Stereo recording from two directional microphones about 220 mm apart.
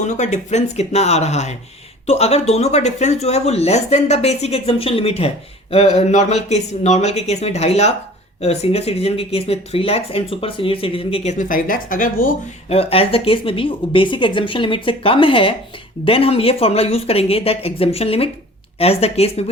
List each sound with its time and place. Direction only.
0.0 s speech: 30° left (ahead or behind)